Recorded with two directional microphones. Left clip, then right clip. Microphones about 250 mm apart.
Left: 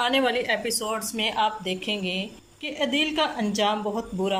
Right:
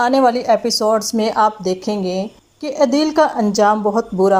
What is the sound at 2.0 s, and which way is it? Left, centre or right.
Speech, right.